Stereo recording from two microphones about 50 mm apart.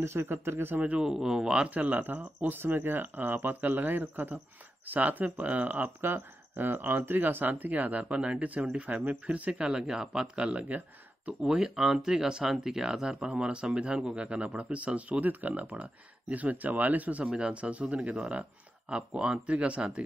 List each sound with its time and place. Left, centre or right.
0.0 s speech: right
0.9 s speech: centre
1.7 s speech: right
5.9 s speech: right
8.0 s speech: right
9.5 s speech: centre; by 17.2 s right
17.2 s speech: right